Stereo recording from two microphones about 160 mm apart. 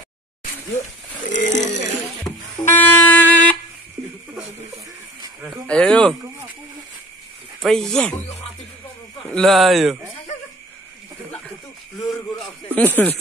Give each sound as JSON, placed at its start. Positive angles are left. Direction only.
{"t": 1.3, "sound": "a sound", "side_deg": 50}
{"t": 2.3, "sound": "music", "side_deg": 20}
{"t": 2.6, "sound": "wind instrument", "side_deg": 10}
{"t": 5.7, "sound": "speech", "side_deg": 5}
{"t": 7.6, "sound": "speech", "side_deg": 5}
{"t": 9.3, "sound": "speech", "side_deg": 0}
{"t": 12.1, "sound": "a sound", "side_deg": 0}
{"t": 12.8, "sound": "speech", "side_deg": 10}